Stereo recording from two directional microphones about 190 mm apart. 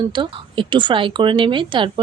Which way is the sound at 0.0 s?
25° right (ahead or behind).